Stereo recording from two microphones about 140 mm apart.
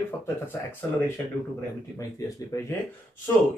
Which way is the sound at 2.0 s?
25° left (ahead or behind).